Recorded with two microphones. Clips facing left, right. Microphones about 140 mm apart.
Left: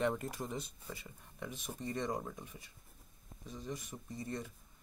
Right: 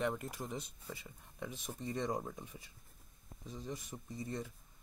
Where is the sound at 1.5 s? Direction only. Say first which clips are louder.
Left 1 dB; 15° right (ahead or behind).